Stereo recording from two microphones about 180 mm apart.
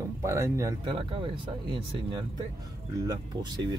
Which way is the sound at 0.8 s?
30° right (ahead or behind).